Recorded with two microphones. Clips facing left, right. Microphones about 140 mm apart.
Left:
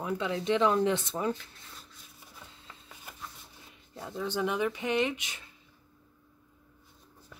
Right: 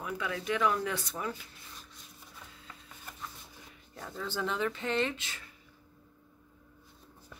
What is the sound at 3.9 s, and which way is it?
A woman's voice, 15° left (ahead or behind).